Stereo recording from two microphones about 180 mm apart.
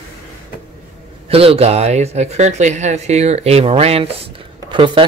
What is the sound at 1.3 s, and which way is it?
Speech, 30° right (ahead or behind).